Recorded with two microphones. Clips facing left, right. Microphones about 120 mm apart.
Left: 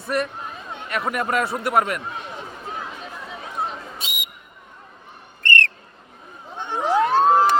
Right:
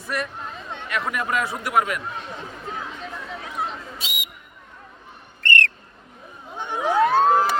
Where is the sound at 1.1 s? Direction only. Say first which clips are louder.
Left 3 dB; 40° left (ahead or behind).